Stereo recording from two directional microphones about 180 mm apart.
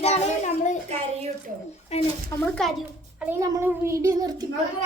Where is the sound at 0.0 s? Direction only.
40° left (ahead or behind).